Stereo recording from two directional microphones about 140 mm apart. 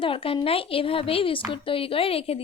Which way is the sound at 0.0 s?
40° left (ahead or behind).